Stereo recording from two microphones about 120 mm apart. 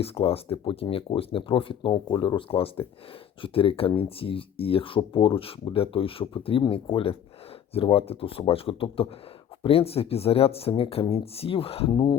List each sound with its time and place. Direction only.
0.0 s speech: 55° left (ahead or behind)
1.9 s speech: 35° left (ahead or behind); by 11.9 s 55° left (ahead or behind)